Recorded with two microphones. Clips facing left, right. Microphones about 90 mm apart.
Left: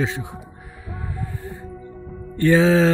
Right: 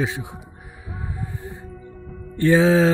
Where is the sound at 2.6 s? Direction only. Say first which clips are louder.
Even; 10° right (ahead or behind).